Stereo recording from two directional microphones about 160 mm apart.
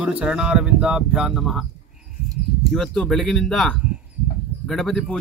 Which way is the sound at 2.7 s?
Centre (ahead or behind).